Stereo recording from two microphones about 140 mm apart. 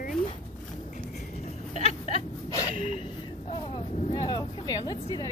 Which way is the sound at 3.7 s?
40° left (ahead or behind).